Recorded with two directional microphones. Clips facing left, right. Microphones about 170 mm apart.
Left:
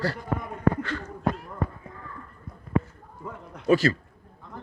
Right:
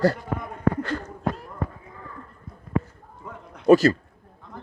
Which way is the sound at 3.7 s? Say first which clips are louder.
Right 6 dB; 40° right (ahead or behind).